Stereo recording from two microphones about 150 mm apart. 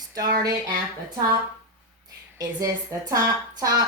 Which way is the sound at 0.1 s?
25° right (ahead or behind).